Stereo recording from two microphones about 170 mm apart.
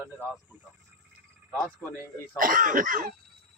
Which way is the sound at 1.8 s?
15° left (ahead or behind).